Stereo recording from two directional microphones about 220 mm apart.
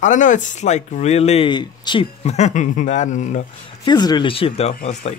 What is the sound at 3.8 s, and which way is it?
Speech, 20° left (ahead or behind).